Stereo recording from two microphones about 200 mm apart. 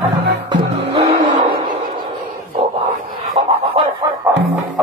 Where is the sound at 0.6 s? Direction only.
30° right (ahead or behind).